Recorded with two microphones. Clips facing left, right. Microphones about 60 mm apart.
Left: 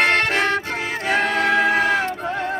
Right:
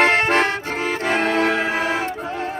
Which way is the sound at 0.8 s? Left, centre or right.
Right.